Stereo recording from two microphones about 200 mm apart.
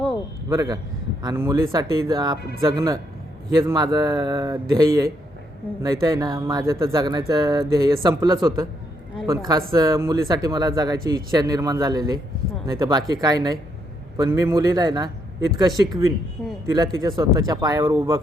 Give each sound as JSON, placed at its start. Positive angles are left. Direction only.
{"t": 0.4, "sound": "speech", "side_deg": -15}